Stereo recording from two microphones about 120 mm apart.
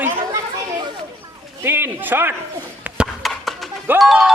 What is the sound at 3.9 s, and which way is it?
Music, centre (ahead or behind).